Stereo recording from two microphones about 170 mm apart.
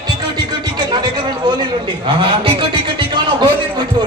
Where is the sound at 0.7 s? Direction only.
25° right (ahead or behind).